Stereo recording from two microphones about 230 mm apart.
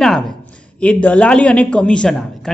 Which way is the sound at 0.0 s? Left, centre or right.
Centre.